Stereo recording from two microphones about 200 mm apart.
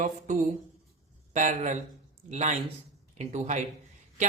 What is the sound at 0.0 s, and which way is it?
A woman's voice, 35° right (ahead or behind).